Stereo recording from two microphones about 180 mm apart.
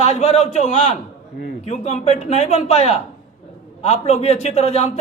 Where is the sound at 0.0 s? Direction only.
40° left (ahead or behind).